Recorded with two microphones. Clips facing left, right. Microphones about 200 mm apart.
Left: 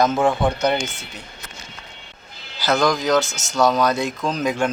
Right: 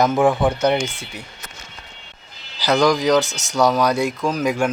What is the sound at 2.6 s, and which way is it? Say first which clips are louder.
A man's voice: right 3 dB; 15° right (ahead or behind).